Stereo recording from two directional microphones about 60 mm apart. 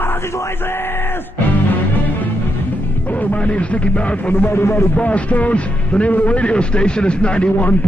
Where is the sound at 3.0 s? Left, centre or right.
Left.